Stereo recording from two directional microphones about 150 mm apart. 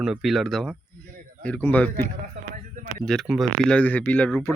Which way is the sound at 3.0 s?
Centre (ahead or behind).